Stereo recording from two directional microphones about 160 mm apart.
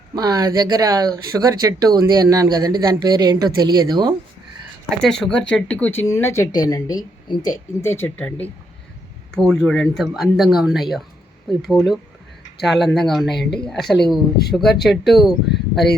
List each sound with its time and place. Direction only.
0.2 s speech: 25° right (ahead or behind)
5.0 s speech: 5° left (ahead or behind)
13.3 s speech: 90° left
13.6 s speech: 5° left (ahead or behind)